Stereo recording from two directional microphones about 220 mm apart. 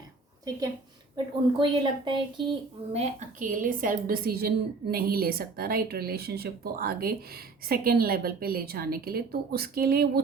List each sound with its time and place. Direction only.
1.1 s speech: 20° right (ahead or behind); by 10.1 s 45° right (ahead or behind)